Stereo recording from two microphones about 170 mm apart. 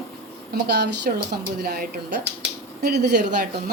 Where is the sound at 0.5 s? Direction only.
75° right (ahead or behind).